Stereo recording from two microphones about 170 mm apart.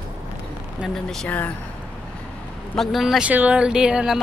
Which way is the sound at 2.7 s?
Centre (ahead or behind).